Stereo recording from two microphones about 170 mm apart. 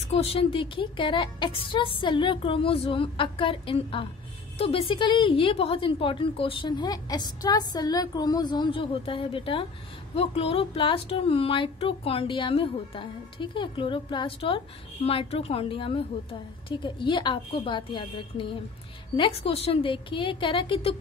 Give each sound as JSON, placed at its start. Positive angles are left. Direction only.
{"t": 0.0, "sound": "a woman's voice", "side_deg": 40}